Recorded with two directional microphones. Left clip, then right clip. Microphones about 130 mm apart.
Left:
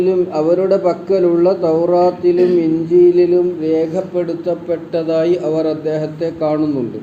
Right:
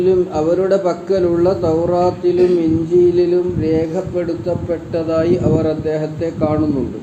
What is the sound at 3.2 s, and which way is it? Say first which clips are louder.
A man's voice: left 2 dB; 45° left (ahead or behind).